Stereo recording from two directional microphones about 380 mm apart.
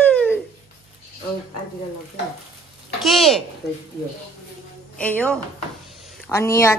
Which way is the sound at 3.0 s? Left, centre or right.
Centre.